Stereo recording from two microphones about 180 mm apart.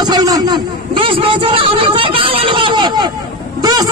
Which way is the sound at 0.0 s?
20° right (ahead or behind).